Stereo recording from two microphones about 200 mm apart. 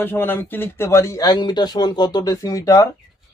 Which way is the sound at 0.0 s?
10° left (ahead or behind).